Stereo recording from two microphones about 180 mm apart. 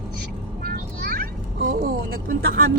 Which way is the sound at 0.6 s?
60° right (ahead or behind).